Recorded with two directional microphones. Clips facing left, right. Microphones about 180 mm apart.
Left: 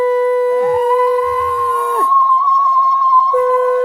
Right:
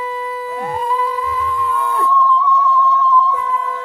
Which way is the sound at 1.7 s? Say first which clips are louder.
Left 3 dB; 45° left (ahead or behind).